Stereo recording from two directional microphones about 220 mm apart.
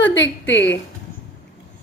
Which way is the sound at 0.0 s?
60° left (ahead or behind).